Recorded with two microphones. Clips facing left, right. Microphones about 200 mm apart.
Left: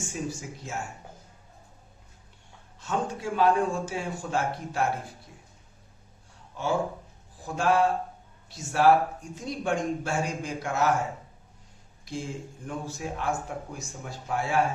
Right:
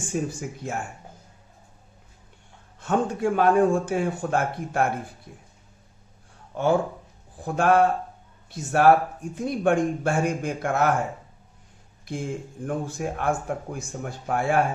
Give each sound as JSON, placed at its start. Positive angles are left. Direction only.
{"t": 0.0, "sound": "speech", "side_deg": -55}
{"t": 2.8, "sound": "speech", "side_deg": -55}
{"t": 6.5, "sound": "speech", "side_deg": -55}
{"t": 12.0, "sound": "speech", "side_deg": -55}